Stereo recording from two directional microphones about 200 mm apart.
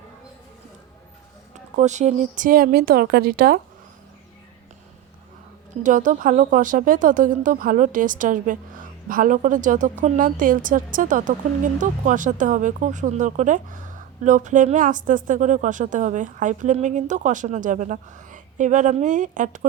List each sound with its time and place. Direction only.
1.7 s speech: 35° right (ahead or behind)
5.8 s a woman's voice: 40° right (ahead or behind)